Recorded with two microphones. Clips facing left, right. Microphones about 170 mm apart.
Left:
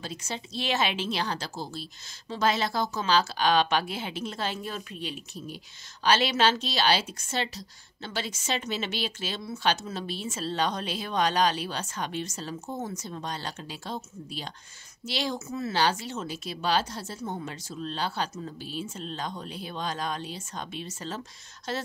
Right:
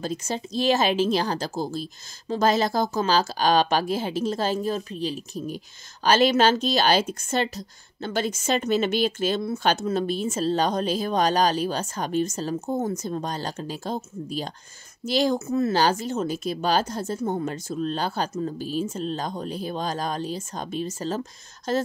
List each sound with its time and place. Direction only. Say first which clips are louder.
0.0 s a woman's voice: right 8 dB; 45° right (ahead or behind)